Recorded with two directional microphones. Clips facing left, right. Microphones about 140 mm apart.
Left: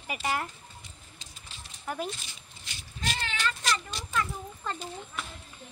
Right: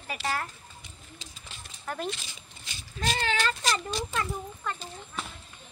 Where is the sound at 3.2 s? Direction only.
35° right (ahead or behind).